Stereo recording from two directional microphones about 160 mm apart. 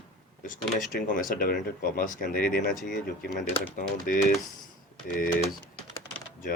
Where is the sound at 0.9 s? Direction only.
60° left (ahead or behind).